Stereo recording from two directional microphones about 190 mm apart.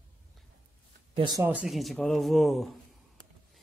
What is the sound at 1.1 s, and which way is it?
Speech, 20° right (ahead or behind).